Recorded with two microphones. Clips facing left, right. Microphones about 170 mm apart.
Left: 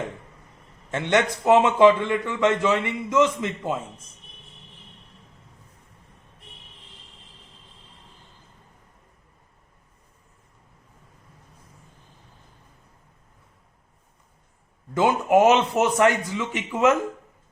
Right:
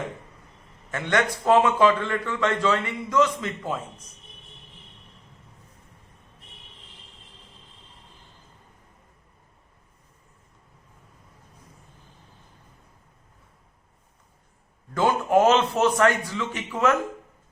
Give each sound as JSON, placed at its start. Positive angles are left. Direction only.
{"t": 0.9, "sound": "a man's voice", "side_deg": 25}
{"t": 14.9, "sound": "a man's voice", "side_deg": 15}